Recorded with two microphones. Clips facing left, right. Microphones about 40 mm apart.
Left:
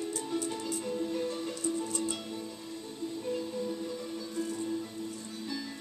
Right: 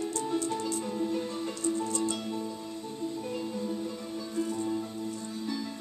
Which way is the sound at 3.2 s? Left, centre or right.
Centre.